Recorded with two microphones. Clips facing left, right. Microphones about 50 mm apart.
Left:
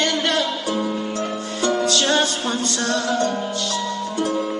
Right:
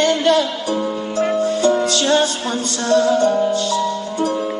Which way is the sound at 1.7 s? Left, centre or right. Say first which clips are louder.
Left 1 dB; right.